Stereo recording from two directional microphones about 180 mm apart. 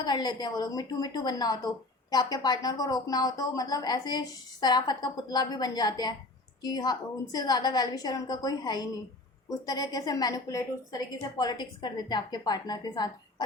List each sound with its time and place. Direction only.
0.0 s a woman's voice: 25° left (ahead or behind)